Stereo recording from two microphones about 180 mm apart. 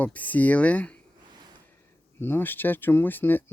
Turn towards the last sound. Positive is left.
turn(degrees=10)  # may be behind; listen again after turning